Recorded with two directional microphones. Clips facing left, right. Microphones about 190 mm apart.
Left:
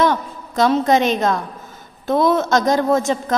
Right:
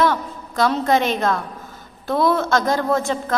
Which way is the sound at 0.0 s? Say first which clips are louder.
Left 2 dB; 20° left (ahead or behind).